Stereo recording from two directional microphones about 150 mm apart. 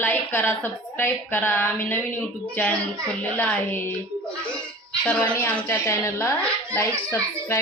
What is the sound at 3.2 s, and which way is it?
Speech, 10° left (ahead or behind).